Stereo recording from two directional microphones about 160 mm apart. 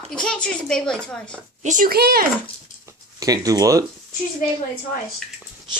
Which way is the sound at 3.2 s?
20° right (ahead or behind).